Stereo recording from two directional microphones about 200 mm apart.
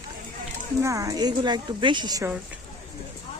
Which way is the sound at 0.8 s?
15° right (ahead or behind).